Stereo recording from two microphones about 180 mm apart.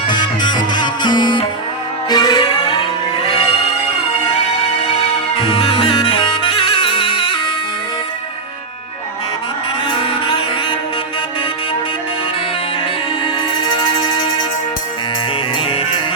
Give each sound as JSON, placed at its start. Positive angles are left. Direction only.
{"t": 0.7, "sound": "music", "side_deg": 25}
{"t": 5.6, "sound": "music", "side_deg": 30}
{"t": 14.0, "sound": "music", "side_deg": 20}
{"t": 15.5, "sound": "music", "side_deg": 30}